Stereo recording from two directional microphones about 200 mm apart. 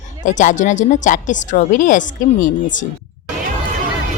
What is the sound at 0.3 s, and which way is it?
Speech, 40° left (ahead or behind).